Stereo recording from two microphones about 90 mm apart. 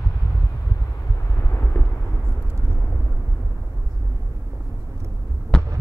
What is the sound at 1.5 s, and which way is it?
Vehicle, 25° left (ahead or behind).